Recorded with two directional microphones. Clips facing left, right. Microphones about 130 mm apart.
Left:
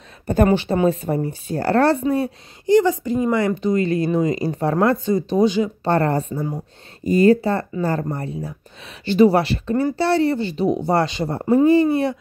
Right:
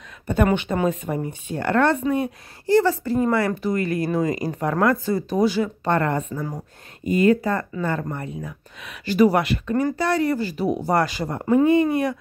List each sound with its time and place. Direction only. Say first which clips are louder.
0.3 s speech: left 3 dB; 35° left (ahead or behind)
2.6 s speech: left 3 dB; 15° left (ahead or behind)
5.9 s speech: left 3 dB; 35° left (ahead or behind)